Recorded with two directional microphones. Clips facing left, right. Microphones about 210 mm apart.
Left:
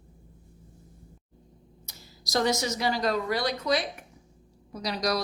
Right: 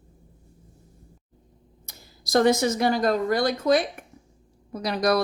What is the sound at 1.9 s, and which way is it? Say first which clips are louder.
Speech: right 8 dB; 55° right (ahead or behind).